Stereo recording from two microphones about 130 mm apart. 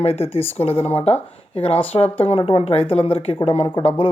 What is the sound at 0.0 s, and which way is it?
A man's voice, 50° left (ahead or behind).